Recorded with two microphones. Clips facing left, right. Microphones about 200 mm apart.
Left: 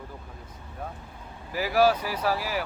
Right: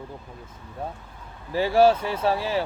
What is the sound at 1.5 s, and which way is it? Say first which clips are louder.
Speech: right 4 dB; 30° right (ahead or behind).